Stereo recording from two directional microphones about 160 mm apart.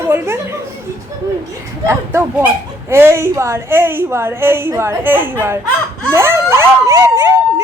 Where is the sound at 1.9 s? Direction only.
15° right (ahead or behind).